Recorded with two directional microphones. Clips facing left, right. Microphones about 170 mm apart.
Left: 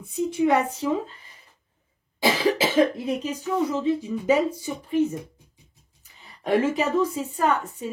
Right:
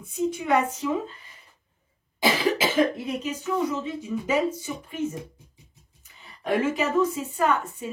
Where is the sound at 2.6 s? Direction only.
35° left (ahead or behind).